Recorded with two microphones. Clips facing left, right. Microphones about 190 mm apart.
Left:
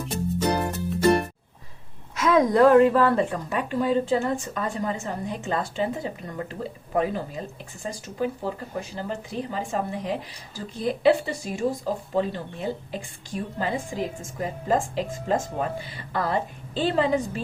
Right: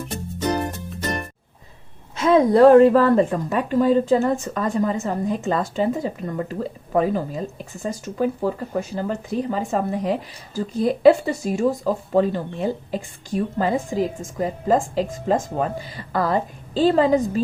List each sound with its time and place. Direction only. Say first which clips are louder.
2.1 s a woman's voice: right 4 dB; 30° right (ahead or behind)